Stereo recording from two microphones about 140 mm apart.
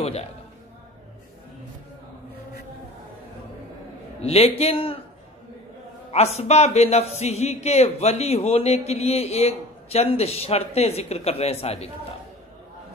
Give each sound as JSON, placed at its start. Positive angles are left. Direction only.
{"t": 0.0, "sound": "a sound", "side_deg": 45}
{"t": 4.2, "sound": "speech", "side_deg": 45}
{"t": 6.1, "sound": "speech", "side_deg": 50}